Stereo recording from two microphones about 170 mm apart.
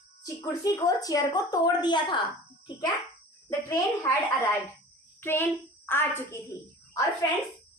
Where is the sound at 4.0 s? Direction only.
15° left (ahead or behind).